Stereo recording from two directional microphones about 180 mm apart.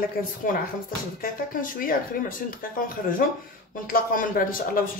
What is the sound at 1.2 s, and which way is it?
Speech, 50° left (ahead or behind).